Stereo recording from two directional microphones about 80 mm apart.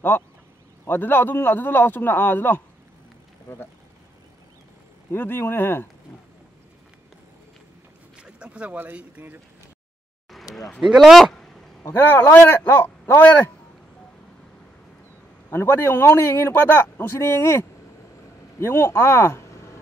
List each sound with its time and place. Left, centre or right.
0.8 s speech: left
5.1 s speech: left
8.2 s a sound: centre
8.7 s speech: right
10.8 s speech: centre
11.9 s speech: left
15.5 s speech: left